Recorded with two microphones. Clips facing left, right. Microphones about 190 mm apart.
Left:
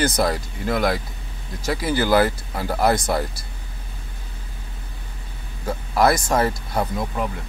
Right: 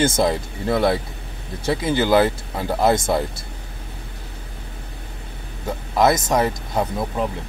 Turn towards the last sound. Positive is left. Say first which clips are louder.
# right 2 dB
turn(degrees=-25)  # may be behind; listen again after turning